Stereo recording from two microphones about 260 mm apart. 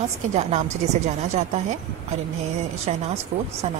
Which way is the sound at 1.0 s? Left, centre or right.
Right.